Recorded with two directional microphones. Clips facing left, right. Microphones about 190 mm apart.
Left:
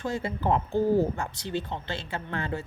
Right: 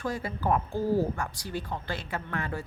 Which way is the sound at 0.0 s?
25° left (ahead or behind).